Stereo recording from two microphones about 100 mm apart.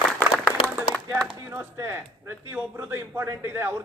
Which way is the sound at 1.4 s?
25° right (ahead or behind).